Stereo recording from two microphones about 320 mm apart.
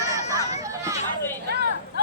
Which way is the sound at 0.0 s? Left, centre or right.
Centre.